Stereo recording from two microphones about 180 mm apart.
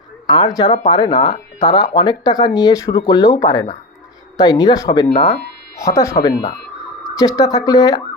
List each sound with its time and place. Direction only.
0.3 s speech: 25° left (ahead or behind)